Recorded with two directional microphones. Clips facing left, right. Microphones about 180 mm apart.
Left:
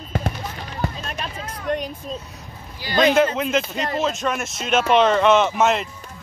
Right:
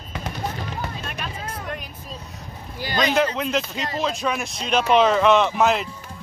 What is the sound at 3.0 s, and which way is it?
Speech, centre (ahead or behind).